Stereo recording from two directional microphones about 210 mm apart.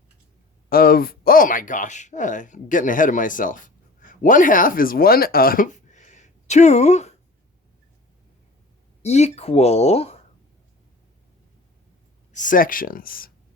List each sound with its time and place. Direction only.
0.7 s speech: 45° left (ahead or behind)
9.0 s speech: 30° left (ahead or behind)
12.3 s speech: 40° left (ahead or behind)